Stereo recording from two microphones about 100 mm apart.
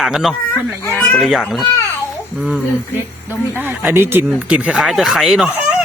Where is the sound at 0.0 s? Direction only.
Centre (ahead or behind).